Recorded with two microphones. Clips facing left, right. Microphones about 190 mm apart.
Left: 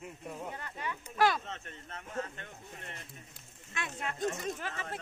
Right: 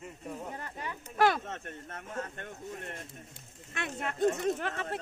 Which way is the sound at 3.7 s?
55° right (ahead or behind).